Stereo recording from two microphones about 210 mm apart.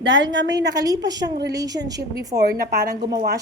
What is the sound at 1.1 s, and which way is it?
Speech, 20° right (ahead or behind).